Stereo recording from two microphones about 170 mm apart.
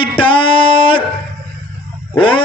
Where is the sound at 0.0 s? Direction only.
30° left (ahead or behind).